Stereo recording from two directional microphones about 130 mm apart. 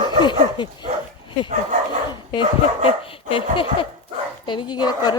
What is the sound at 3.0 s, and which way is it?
A woman's voice, 45° left (ahead or behind).